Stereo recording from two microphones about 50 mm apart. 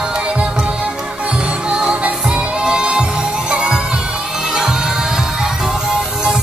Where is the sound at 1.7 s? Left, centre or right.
Centre.